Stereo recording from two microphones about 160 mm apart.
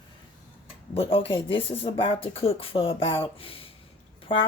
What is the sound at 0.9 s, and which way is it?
Speech, 35° left (ahead or behind).